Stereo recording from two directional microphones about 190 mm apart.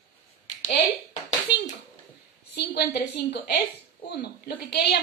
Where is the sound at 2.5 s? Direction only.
60° left (ahead or behind).